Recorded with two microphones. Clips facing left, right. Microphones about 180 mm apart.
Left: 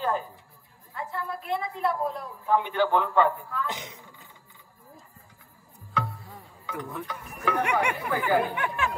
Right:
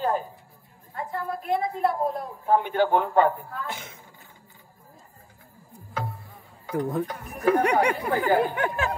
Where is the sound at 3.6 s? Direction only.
15° left (ahead or behind).